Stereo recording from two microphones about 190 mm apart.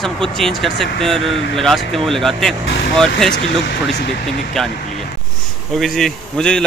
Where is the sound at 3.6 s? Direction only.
65° left (ahead or behind).